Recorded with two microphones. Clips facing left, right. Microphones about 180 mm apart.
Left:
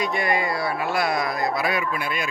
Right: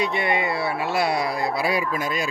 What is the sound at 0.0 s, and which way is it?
Speech, 25° right (ahead or behind).